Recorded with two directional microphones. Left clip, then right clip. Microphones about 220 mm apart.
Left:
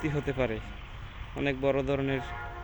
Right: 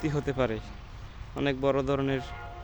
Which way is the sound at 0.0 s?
15° right (ahead or behind).